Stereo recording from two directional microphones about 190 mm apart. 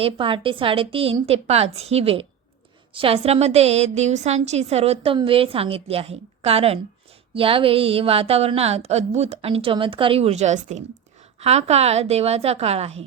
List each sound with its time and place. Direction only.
0.0 s a woman's voice: 25° right (ahead or behind)